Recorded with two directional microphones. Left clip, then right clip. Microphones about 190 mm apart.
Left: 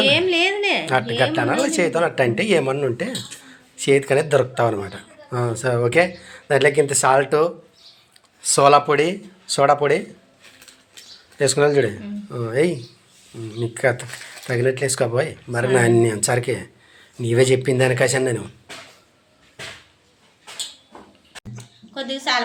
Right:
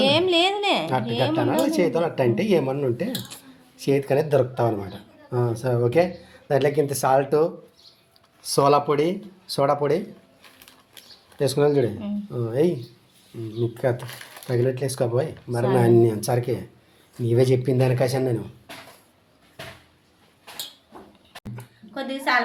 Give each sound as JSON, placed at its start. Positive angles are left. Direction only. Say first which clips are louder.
{"t": 0.0, "sound": "a sound", "louder": "left 2 dB", "side_deg": -40}
{"t": 0.9, "sound": "speech", "louder": "left 4 dB", "side_deg": -5}
{"t": 11.3, "sound": "speech", "louder": "left 3 dB", "side_deg": -5}
{"t": 12.3, "sound": "speech", "louder": "left 3 dB", "side_deg": 10}
{"t": 12.5, "sound": "speech", "louder": "left 3 dB", "side_deg": -5}
{"t": 21.5, "sound": "a sound", "louder": "left 2 dB", "side_deg": -10}